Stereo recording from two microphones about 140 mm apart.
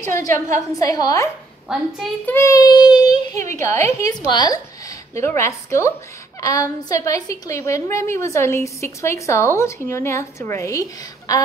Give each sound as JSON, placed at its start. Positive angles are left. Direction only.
{"t": 0.0, "sound": "a woman's voice", "side_deg": 20}
{"t": 1.7, "sound": "a woman's voice", "side_deg": 0}
{"t": 2.2, "sound": "a child's voice", "side_deg": 20}
{"t": 5.1, "sound": "a woman's voice", "side_deg": 20}